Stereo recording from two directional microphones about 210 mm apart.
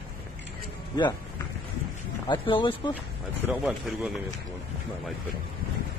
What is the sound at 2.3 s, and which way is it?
Speech, 25° left (ahead or behind).